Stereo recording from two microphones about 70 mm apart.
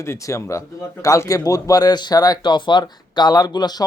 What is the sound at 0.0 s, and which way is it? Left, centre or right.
Speech, left.